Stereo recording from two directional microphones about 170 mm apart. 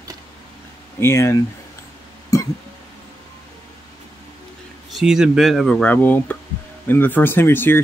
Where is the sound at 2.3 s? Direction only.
20° left (ahead or behind).